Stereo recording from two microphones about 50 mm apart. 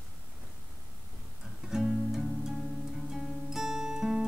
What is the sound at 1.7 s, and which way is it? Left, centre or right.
Music, centre.